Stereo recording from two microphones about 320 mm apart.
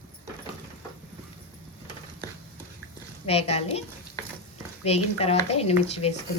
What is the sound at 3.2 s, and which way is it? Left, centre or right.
Speech, centre.